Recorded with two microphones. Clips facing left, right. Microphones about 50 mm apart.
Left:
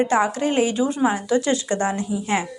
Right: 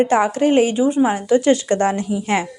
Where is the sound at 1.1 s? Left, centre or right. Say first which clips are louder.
Right 5 dB; right.